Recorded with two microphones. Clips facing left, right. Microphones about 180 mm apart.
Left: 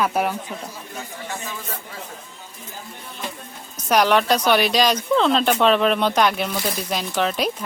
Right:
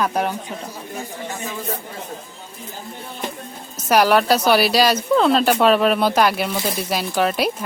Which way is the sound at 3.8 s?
5° right (ahead or behind).